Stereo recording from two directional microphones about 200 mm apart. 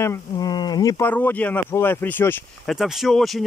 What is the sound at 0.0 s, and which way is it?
Speech, 15° left (ahead or behind).